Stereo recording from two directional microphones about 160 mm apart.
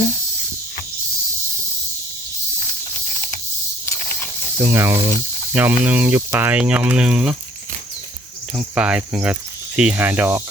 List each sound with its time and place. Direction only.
4.5 s speech: 15° right (ahead or behind)
8.5 s speech: 5° right (ahead or behind)